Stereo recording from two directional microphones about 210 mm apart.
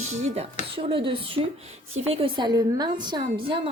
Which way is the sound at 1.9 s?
25° right (ahead or behind).